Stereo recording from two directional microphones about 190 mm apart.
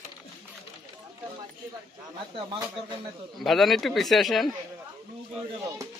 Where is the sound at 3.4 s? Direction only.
Centre (ahead or behind).